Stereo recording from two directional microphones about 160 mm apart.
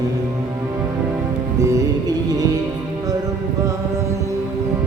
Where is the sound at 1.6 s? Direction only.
20° right (ahead or behind).